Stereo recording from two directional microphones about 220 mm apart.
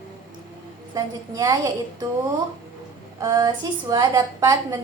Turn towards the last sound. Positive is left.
turn(degrees=-15)  # may be behind; listen again after turning